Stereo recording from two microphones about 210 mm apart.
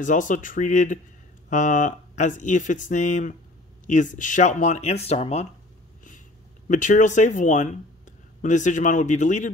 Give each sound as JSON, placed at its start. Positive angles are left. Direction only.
{"t": 0.0, "sound": "speech", "side_deg": 35}
{"t": 6.7, "sound": "speech", "side_deg": 35}